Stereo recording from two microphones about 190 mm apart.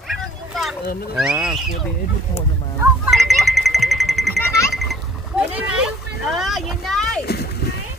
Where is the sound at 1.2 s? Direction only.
5° right (ahead or behind).